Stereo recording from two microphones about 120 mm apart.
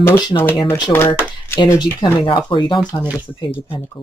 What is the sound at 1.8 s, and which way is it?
Speech, 40° left (ahead or behind).